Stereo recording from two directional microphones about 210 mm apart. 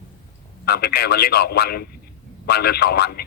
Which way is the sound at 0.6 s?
50° left (ahead or behind).